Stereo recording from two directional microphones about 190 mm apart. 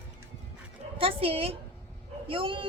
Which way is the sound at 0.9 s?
30° right (ahead or behind).